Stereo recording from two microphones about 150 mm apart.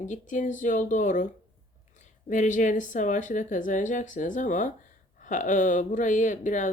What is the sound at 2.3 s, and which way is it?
Speech, 55° left (ahead or behind).